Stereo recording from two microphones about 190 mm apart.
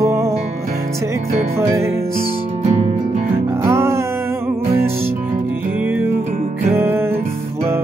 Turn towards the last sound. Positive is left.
turn(degrees=-10)  # may be behind; listen again after turning